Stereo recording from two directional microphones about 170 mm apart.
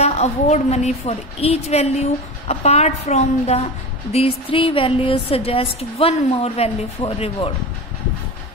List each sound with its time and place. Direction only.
0.0 s a woman's voice: 40° left (ahead or behind)